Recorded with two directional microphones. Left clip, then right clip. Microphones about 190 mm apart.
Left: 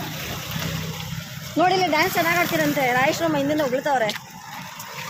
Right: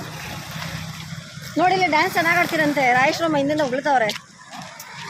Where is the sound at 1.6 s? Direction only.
20° right (ahead or behind).